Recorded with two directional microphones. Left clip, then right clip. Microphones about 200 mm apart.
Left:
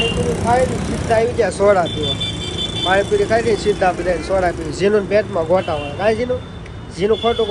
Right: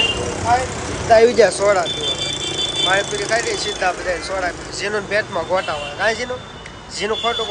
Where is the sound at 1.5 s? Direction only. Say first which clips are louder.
Left 2 dB; centre (ahead or behind).